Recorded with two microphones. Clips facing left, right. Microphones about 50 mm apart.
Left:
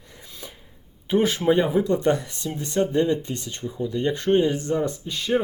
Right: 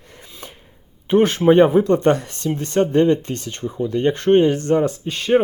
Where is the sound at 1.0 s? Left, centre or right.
Right.